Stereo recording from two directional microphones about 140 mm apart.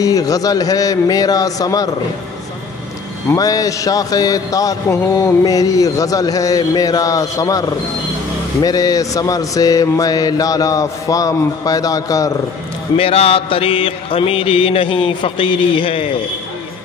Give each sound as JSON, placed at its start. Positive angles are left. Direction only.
{"t": 0.0, "sound": "a man's voice", "side_deg": 25}
{"t": 3.3, "sound": "a man's voice", "side_deg": 25}
{"t": 8.6, "sound": "a man's voice", "side_deg": 25}
{"t": 12.9, "sound": "mantra", "side_deg": 45}